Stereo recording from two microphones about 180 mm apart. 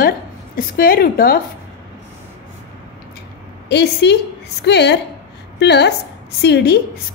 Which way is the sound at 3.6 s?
70° left (ahead or behind).